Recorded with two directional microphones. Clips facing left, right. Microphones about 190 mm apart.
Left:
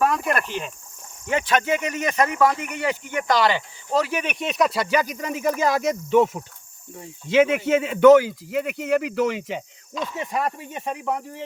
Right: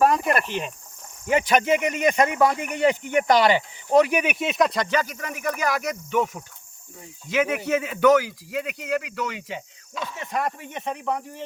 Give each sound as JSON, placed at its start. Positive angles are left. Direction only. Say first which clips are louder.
{"t": 0.0, "sound": "speech", "louder": "right 2 dB", "side_deg": -35}
{"t": 1.3, "sound": "speech", "louder": "right 2 dB", "side_deg": -15}
{"t": 10.2, "sound": "speech", "louder": "left 1 dB", "side_deg": 10}